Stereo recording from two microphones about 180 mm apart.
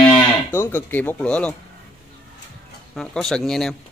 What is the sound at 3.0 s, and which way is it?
Speech, centre (ahead or behind).